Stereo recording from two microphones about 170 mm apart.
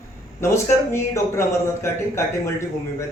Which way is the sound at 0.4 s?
15° left (ahead or behind).